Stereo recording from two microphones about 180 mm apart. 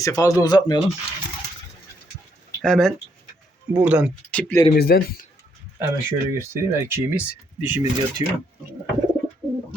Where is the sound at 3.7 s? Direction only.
10° right (ahead or behind).